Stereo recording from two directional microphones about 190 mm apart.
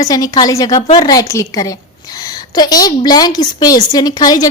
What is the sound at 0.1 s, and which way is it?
A woman's voice, 20° left (ahead or behind).